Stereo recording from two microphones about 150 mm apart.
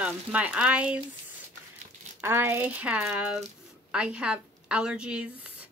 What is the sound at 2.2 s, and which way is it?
A woman's voice, 15° right (ahead or behind).